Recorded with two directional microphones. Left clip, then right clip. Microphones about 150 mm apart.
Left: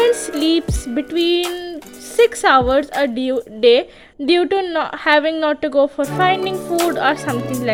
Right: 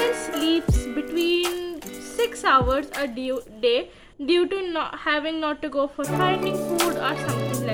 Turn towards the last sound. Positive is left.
turn(degrees=0)  # may be behind; listen again after turning